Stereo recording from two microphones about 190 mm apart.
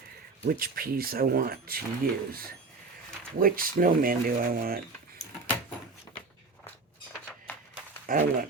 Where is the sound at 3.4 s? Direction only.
50° right (ahead or behind).